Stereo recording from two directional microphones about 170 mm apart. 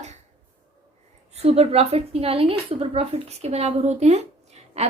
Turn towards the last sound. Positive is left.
turn(degrees=-40)  # may be behind; listen again after turning